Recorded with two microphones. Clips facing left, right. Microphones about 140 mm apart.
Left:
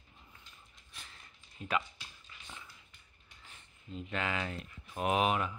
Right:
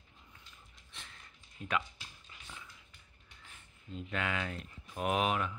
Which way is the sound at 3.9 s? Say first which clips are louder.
Even; centre (ahead or behind).